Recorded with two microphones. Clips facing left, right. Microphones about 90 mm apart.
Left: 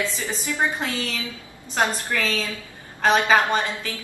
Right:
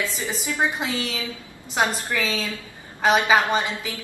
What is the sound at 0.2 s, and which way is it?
A woman's voice, 15° right (ahead or behind).